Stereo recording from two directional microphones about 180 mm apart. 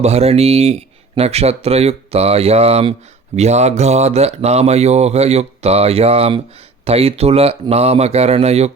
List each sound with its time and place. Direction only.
0.0 s speech: 35° right (ahead or behind)